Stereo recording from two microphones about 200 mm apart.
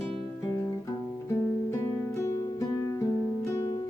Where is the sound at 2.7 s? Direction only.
15° left (ahead or behind).